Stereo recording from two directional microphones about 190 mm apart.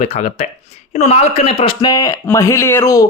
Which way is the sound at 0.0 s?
35° left (ahead or behind).